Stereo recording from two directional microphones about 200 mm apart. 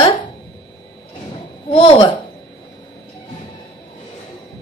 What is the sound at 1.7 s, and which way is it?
Speech, 25° left (ahead or behind).